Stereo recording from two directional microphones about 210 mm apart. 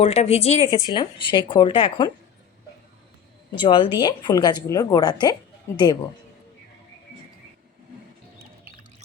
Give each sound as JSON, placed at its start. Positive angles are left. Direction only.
{"t": 0.0, "sound": "a woman's voice", "side_deg": 30}
{"t": 3.6, "sound": "a woman's voice", "side_deg": 25}